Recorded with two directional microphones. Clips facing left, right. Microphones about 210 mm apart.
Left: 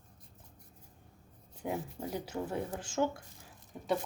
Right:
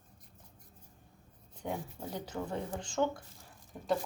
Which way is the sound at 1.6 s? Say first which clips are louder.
Left 2 dB; 10° left (ahead or behind).